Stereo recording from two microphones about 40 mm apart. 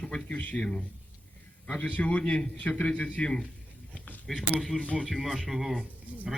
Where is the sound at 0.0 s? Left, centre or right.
Left.